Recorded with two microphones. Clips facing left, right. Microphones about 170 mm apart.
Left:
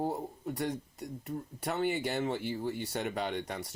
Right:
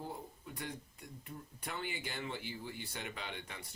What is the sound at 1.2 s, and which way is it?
Speech, 45° left (ahead or behind).